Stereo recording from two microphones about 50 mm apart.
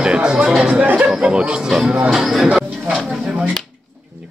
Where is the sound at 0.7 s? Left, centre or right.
Right.